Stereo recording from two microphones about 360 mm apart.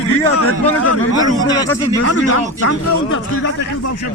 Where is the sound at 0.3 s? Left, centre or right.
Left.